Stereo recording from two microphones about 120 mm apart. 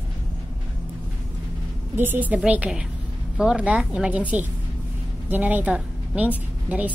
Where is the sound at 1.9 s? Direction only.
15° right (ahead or behind).